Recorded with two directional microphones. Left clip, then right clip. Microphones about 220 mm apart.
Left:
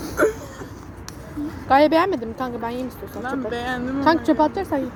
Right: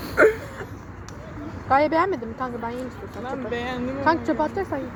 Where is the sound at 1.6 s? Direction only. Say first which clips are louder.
Left 4 dB; 55° left (ahead or behind).